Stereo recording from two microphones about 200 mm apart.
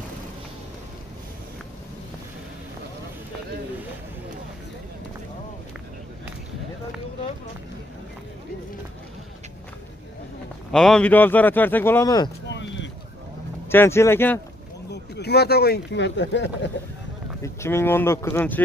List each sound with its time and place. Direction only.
10.7 s speech: centre (ahead or behind)
12.4 s a sound: 65° left (ahead or behind)
13.7 s speech: 10° left (ahead or behind)
14.9 s speech: 55° left (ahead or behind)
17.4 s speech: 15° left (ahead or behind)